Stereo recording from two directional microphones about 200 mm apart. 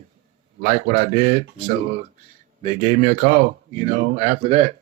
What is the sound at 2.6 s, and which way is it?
Speech, 40° right (ahead or behind).